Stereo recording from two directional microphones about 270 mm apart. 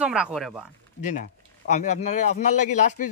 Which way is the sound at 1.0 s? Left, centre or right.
Left.